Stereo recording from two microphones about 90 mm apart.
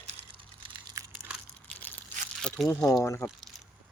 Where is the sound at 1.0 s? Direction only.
45° right (ahead or behind).